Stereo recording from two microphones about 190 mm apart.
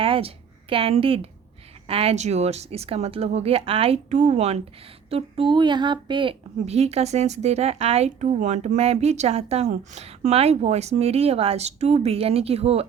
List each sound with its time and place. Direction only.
0.0 s a woman's voice: 30° right (ahead or behind)